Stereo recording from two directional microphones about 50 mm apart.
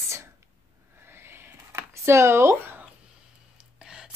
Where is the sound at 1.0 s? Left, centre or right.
Right.